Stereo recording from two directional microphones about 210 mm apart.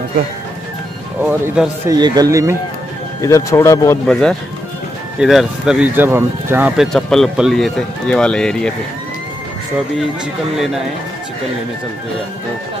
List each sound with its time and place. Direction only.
1.2 s speech: 5° right (ahead or behind)
1.9 s a man's voice: 20° right (ahead or behind)
3.2 s speech: 15° left (ahead or behind); by 6.9 s 10° right (ahead or behind)
6.9 s speech: centre (ahead or behind)